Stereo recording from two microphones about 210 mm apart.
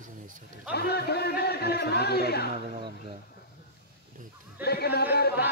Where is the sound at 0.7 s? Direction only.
50° left (ahead or behind).